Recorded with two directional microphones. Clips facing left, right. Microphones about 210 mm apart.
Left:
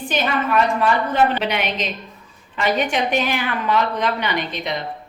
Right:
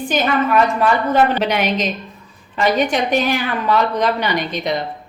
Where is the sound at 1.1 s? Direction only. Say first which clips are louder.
Right 3 dB; 40° right (ahead or behind).